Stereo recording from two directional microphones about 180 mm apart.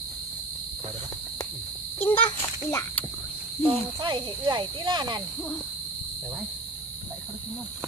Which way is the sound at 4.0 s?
25° right (ahead or behind).